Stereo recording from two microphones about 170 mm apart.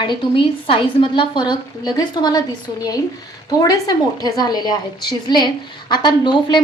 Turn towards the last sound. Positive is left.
turn(degrees=25)  # may be behind; listen again after turning